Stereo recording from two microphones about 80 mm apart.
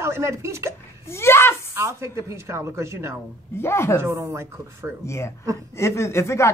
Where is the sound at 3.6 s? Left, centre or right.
Left.